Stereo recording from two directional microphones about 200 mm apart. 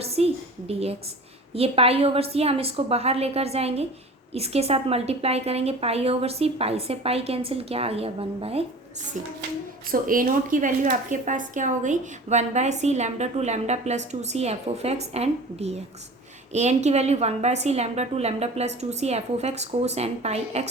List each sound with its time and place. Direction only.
0.0 s a woman's voice: 30° right (ahead or behind)
9.9 s speech: 45° right (ahead or behind)